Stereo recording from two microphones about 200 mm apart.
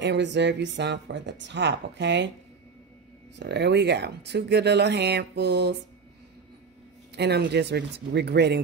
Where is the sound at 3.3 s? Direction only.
60° right (ahead or behind).